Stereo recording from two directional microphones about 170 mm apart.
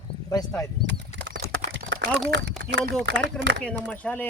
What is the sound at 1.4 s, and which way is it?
Clip-clop, 40° left (ahead or behind).